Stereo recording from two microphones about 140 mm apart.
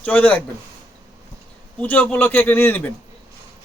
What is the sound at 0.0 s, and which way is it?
Speech, 10° left (ahead or behind).